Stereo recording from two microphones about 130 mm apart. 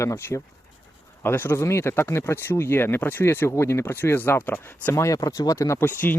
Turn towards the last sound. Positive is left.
turn(degrees=15)  # may be behind; listen again after turning